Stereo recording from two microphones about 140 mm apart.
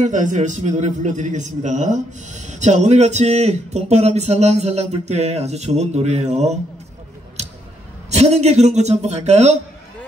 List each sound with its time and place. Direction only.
0.0 s a man's voice: 60° right (ahead or behind)
8.1 s a man's voice: 50° right (ahead or behind)